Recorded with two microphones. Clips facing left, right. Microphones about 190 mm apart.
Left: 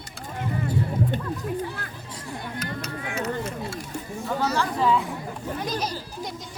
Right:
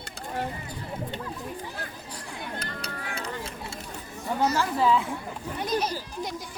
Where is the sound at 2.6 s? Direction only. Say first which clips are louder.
Left 4 dB; 35° right (ahead or behind).